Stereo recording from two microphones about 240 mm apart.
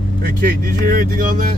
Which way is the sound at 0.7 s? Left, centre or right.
Right.